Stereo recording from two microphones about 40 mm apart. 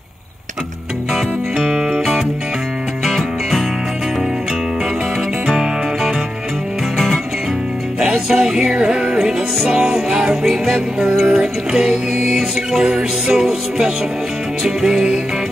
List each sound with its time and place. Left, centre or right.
1.7 s music: right
3.1 s music: centre
8.3 s music: centre